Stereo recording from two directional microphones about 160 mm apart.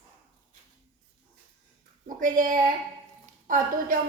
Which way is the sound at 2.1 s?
55° right (ahead or behind).